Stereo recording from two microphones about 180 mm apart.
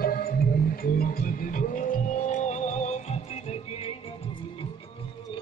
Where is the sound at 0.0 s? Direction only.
55° left (ahead or behind).